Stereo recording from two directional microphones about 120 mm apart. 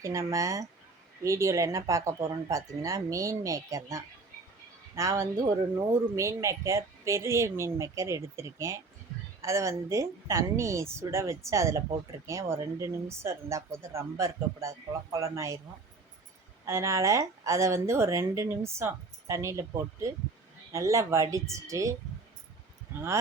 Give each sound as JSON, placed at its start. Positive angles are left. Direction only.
{"t": 0.0, "sound": "speech", "side_deg": -25}
{"t": 16.6, "sound": "speech", "side_deg": -25}